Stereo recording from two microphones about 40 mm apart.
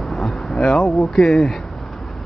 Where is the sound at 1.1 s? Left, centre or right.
Centre.